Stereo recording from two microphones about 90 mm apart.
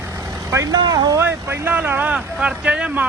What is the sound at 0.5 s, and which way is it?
Speech, 40° right (ahead or behind).